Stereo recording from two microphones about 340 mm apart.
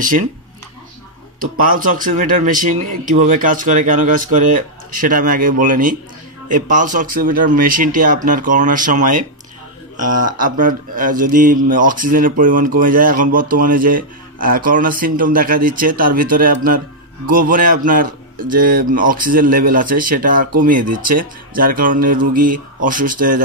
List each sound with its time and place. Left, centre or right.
1.4 s speech: right